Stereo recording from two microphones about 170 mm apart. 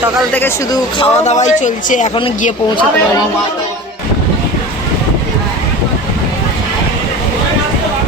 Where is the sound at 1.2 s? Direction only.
45° left (ahead or behind).